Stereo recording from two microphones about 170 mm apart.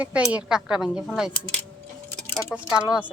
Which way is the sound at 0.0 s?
10° right (ahead or behind).